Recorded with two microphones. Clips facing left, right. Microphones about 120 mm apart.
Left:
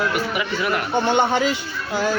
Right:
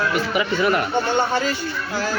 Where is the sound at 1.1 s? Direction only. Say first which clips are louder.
Left 3 dB; 20° left (ahead or behind).